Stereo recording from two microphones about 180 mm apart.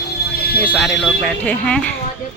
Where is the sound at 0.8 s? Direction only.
5° left (ahead or behind).